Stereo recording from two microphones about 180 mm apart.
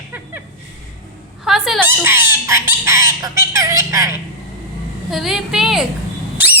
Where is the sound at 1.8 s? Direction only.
10° right (ahead or behind).